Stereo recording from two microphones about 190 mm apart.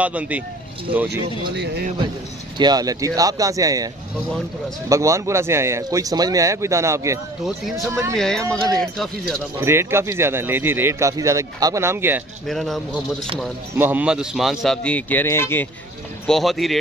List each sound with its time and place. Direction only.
0.0 s speech: 5° right (ahead or behind)
1.5 s speech: 65° right (ahead or behind)
2.5 s speech: 20° right (ahead or behind)
8.6 s a man's voice: centre (ahead or behind)
9.6 s speech: 15° right (ahead or behind)
12.4 s a man's voice: centre (ahead or behind)
16.3 s a man's voice: centre (ahead or behind)